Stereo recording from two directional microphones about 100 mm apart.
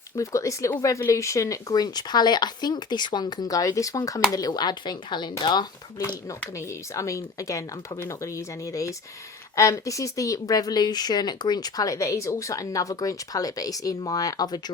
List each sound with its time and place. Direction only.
0.2 s speech: 30° left (ahead or behind); by 5.6 s 45° left (ahead or behind)
6.6 s speech: 30° left (ahead or behind)